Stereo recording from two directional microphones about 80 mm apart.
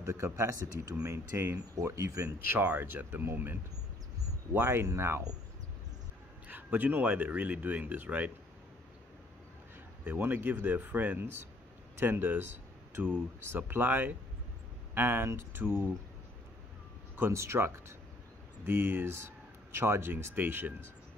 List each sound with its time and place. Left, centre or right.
0.0 s speech: right
2.6 s speech: right
4.6 s speech: right
6.4 s speech: right
10.0 s speech: right
17.3 s speech: right